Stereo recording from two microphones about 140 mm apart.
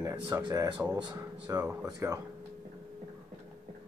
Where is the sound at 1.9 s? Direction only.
25° right (ahead or behind).